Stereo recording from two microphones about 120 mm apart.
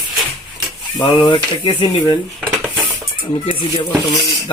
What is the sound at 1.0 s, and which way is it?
Speech, 40° left (ahead or behind).